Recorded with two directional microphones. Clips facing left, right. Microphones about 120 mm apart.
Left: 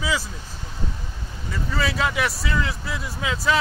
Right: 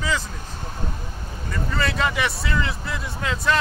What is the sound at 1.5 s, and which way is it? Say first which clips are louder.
Speech: even; 5° left (ahead or behind).